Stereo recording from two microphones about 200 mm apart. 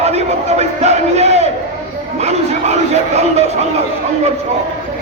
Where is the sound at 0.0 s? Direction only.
35° right (ahead or behind).